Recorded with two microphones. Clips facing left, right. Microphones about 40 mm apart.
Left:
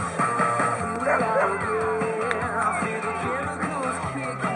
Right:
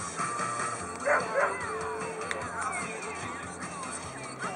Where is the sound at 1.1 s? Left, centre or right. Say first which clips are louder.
Left 6 dB; centre.